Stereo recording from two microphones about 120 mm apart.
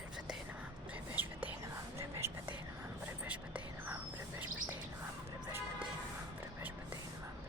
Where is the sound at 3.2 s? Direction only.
10° right (ahead or behind).